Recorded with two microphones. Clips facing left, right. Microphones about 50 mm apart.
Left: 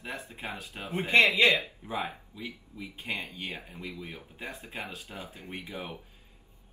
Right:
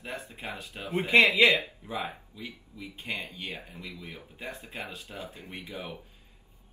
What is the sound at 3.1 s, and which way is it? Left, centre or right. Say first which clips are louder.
Speech: even; centre.